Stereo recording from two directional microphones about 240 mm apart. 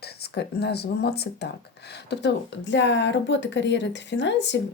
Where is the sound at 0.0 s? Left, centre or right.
Left.